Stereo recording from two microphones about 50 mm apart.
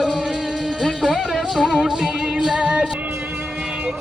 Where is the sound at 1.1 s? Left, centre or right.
Centre.